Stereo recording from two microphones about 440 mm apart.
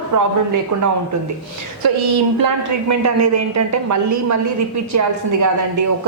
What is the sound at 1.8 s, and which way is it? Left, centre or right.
A woman's voice, right.